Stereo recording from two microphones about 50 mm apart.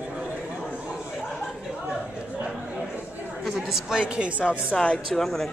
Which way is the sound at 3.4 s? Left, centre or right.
Centre.